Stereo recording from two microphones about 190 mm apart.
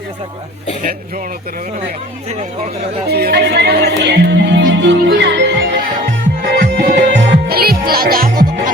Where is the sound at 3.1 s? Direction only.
55° right (ahead or behind).